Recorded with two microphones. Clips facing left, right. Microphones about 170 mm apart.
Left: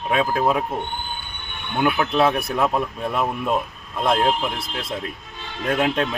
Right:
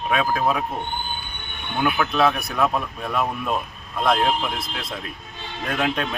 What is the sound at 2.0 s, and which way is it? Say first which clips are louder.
Speech: even; 25° left (ahead or behind).